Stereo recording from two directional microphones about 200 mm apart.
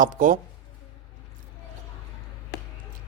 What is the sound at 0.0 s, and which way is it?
Speech, 40° right (ahead or behind).